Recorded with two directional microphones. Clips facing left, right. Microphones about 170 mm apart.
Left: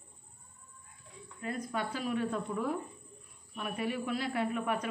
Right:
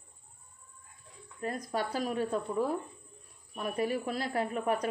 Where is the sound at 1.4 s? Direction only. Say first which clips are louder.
Right 2 dB; 40° right (ahead or behind).